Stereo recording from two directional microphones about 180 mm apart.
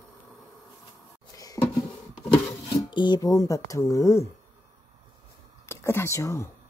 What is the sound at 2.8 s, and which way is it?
Speech, 25° left (ahead or behind).